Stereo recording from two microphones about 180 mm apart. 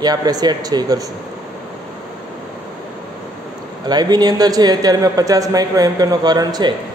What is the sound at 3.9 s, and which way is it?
A woman's voice, 20° right (ahead or behind).